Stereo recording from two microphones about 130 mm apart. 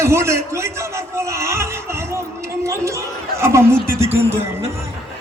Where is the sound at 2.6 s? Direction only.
20° right (ahead or behind).